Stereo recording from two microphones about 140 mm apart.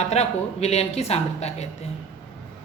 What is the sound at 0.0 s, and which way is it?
A woman's voice, 50° left (ahead or behind).